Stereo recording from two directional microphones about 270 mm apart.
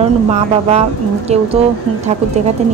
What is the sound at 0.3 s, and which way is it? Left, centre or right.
Speech, right.